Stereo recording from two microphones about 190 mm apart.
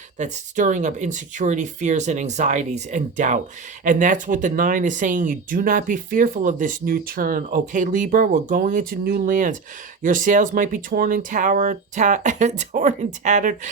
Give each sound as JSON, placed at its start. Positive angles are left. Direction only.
{"t": 0.2, "sound": "speech", "side_deg": -40}